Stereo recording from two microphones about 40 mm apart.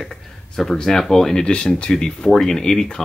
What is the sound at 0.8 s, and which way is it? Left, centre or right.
Speech, centre.